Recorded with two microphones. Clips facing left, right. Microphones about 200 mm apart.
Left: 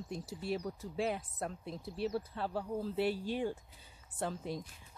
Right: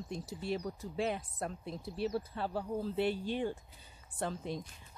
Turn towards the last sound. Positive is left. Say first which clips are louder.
# right 1 dB
turn(degrees=5)  # may be behind; listen again after turning